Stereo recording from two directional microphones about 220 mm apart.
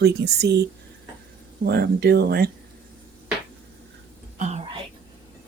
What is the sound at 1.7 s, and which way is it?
Speech, 45° right (ahead or behind).